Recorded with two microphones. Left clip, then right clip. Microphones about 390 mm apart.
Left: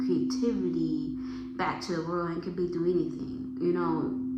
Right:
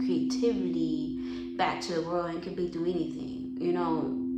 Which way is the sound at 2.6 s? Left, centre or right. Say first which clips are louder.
Left 3 dB; centre.